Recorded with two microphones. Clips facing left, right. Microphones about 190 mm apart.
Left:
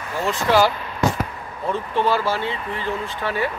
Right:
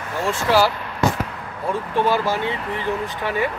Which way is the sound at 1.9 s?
15° right (ahead or behind).